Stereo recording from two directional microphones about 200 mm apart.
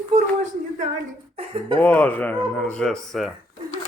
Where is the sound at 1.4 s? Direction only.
25° right (ahead or behind).